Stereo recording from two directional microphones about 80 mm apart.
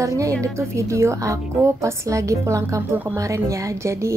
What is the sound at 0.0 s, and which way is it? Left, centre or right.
A woman's voice, right.